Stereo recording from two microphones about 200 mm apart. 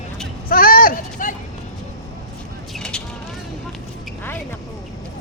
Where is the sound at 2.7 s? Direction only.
5° left (ahead or behind).